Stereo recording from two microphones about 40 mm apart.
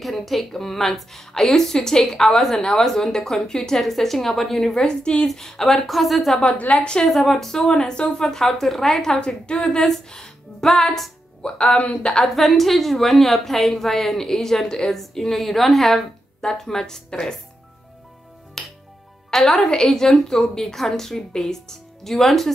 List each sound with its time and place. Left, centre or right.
0.0 s a woman's voice: centre; by 5.3 s left
5.3 s speech: centre
6.8 s a woman's voice: left
7.1 s a woman's voice: centre
9.1 s a woman's voice: left
11.4 s a woman's voice: left
12.4 s a woman's voice: centre
18.6 s music: centre
19.3 s a woman's voice: centre